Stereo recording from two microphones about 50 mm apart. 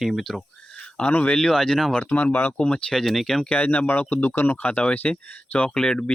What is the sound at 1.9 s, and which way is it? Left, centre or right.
Speech, left.